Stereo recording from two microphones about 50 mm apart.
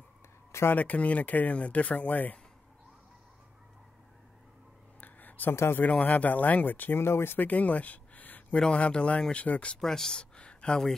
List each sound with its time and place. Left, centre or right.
0.5 s a sound: left
0.7 s speech: left
5.0 s a sound: left
5.5 s a man's voice: left
5.9 s speech: left
7.0 s speech: left
7.3 s speech: left
8.5 s speech: left
9.8 s speech: centre
10.3 s a sound: centre